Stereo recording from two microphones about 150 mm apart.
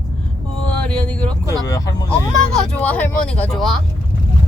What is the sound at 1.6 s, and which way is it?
Speech, 25° left (ahead or behind).